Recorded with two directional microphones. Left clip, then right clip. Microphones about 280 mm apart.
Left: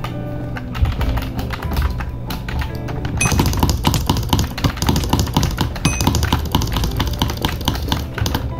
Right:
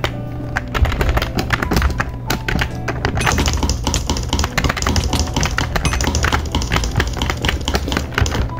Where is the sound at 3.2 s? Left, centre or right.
Centre.